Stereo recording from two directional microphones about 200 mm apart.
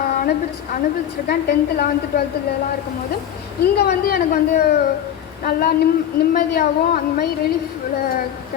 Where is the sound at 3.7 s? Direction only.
50° left (ahead or behind).